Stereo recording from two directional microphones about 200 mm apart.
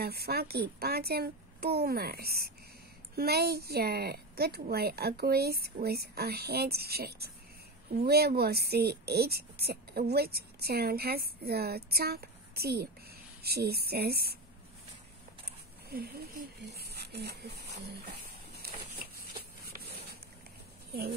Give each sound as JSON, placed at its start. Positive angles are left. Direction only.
{"t": 0.0, "sound": "speech", "side_deg": -50}
{"t": 15.9, "sound": "speech", "side_deg": -50}